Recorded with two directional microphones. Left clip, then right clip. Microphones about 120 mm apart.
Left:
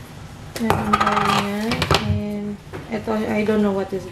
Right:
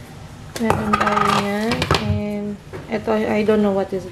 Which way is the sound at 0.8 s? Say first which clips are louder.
Right 1 dB; 15° right (ahead or behind).